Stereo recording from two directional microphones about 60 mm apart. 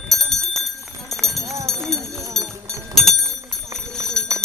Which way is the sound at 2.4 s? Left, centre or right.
Right.